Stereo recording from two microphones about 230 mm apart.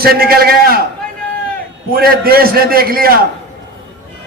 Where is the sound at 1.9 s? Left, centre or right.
Right.